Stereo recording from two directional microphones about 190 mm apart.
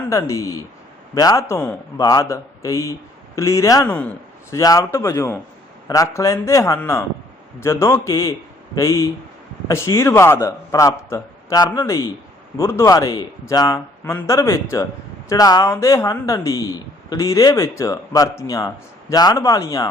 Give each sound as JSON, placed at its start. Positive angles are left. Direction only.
{"t": 0.1, "sound": "speech", "side_deg": 15}